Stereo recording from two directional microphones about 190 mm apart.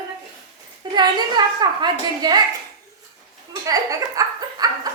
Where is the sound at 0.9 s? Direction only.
25° right (ahead or behind).